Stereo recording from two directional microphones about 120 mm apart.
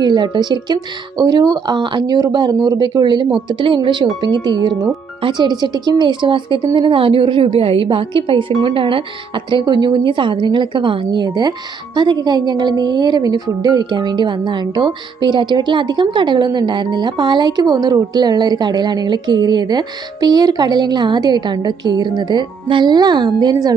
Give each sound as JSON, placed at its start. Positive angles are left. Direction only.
{"t": 0.0, "sound": "a woman's voice", "side_deg": -40}